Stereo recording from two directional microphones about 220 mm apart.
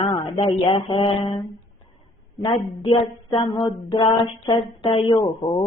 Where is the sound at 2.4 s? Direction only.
25° left (ahead or behind).